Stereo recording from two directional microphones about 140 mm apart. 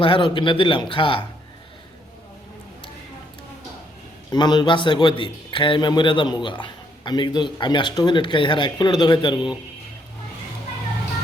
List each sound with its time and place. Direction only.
0.0 s a man's voice: 35° left (ahead or behind)
4.3 s a man's voice: 30° left (ahead or behind)